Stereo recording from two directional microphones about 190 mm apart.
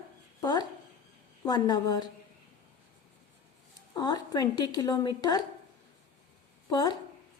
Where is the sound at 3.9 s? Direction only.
20° left (ahead or behind).